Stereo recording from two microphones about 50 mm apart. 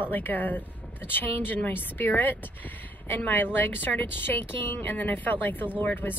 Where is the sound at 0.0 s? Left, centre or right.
Left.